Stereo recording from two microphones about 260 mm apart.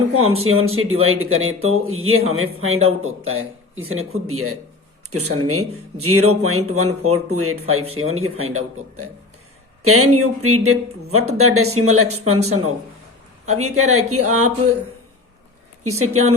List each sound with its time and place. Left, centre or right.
0.1 s a man's voice: right
15.8 s speech: right